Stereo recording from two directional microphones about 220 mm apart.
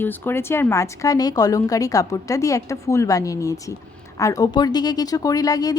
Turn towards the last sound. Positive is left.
turn(degrees=15)  # may be behind; listen again after turning